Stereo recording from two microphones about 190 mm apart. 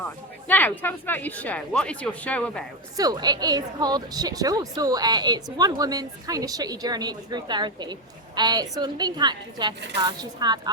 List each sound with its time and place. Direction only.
0.4 s speech: 10° left (ahead or behind)
3.0 s a woman's voice: 20° right (ahead or behind)